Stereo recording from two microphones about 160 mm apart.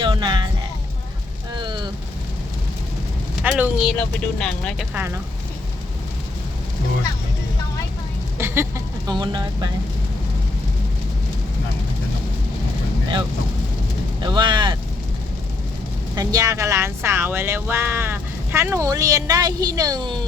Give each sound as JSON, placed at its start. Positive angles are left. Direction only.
{"t": 0.0, "sound": "music", "side_deg": -30}
{"t": 1.5, "sound": "a sound", "side_deg": -30}
{"t": 3.4, "sound": "speech", "side_deg": -5}
{"t": 8.4, "sound": "speech", "side_deg": -15}
{"t": 14.2, "sound": "vehicle", "side_deg": -30}
{"t": 16.1, "sound": "speech", "side_deg": -20}